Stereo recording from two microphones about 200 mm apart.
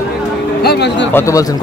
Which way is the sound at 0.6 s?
55° left (ahead or behind).